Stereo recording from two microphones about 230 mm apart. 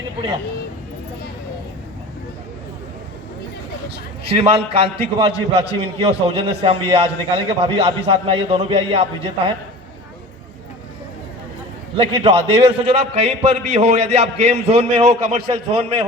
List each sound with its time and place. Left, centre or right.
4.2 s a man's voice: right
11.9 s a man's voice: right